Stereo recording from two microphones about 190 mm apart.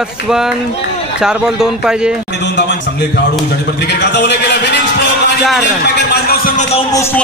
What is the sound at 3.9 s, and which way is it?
Speech, 65° left (ahead or behind).